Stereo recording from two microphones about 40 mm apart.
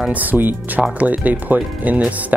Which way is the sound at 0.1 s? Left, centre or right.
Right.